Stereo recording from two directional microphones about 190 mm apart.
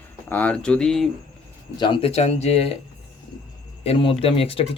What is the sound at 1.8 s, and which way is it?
Speech, 25° left (ahead or behind).